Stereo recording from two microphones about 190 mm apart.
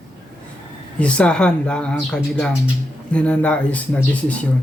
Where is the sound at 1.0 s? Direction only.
5° left (ahead or behind).